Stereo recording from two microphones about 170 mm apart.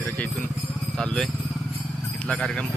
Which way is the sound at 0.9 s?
5° left (ahead or behind).